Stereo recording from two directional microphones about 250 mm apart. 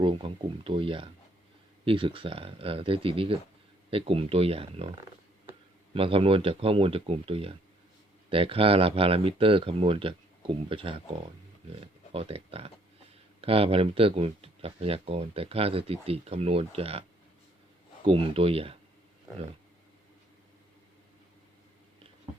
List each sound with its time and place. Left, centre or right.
0.0 s speech: right
5.9 s speech: right
18.0 s speech: right